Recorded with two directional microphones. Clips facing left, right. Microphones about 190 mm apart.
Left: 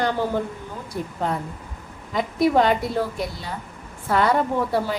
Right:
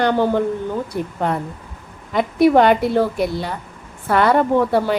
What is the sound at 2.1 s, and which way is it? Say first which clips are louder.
A woman's voice: right 5 dB; 70° right (ahead or behind).